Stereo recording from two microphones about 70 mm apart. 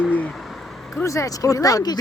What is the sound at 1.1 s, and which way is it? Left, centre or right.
Speech, left.